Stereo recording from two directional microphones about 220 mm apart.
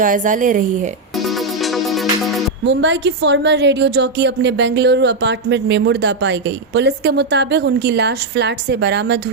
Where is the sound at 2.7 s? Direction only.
55° right (ahead or behind).